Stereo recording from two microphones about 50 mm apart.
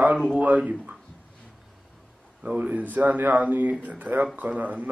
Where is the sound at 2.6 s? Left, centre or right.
Right.